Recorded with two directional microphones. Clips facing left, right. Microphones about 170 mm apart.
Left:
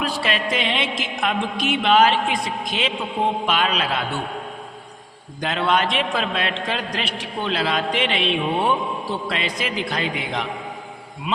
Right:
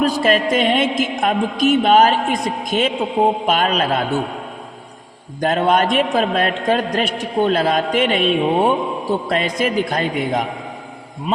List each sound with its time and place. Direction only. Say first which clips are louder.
0.0 s a man's voice: right 8 dB; 45° right (ahead or behind)
5.4 s a man's voice: right 5 dB; 45° right (ahead or behind)